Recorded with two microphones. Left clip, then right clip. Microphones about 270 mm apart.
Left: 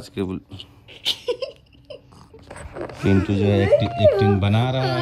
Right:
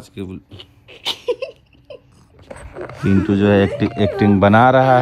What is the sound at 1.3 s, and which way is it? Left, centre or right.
Baby laughter, centre.